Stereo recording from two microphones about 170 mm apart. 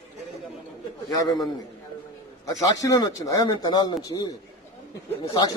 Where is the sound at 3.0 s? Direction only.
25° left (ahead or behind).